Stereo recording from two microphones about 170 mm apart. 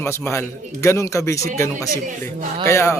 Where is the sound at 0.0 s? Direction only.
15° left (ahead or behind).